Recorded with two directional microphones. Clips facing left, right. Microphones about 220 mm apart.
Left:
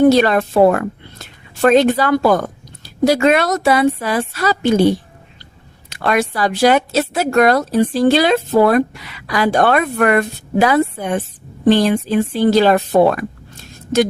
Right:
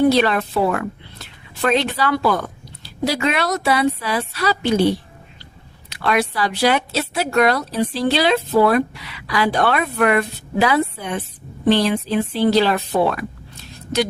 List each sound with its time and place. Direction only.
0.0 s a woman's voice: 45° left (ahead or behind)